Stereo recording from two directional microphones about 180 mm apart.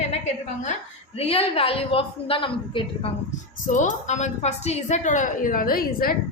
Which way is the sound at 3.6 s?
45° left (ahead or behind).